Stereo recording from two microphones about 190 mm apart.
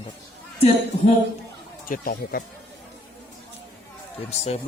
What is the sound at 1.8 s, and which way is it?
Speech, 45° left (ahead or behind).